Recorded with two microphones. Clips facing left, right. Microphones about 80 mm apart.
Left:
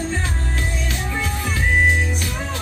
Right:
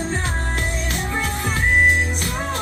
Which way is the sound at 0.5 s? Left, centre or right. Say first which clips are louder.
Right 1 dB; right.